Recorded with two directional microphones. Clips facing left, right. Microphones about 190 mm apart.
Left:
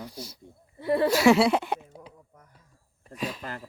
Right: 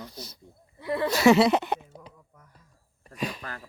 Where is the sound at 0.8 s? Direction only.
30° left (ahead or behind).